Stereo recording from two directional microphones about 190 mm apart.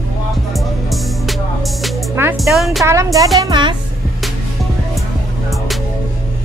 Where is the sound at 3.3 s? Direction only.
20° right (ahead or behind).